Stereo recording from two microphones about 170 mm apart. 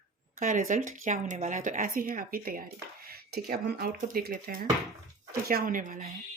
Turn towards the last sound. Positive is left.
turn(degrees=-55)  # may be behind; listen again after turning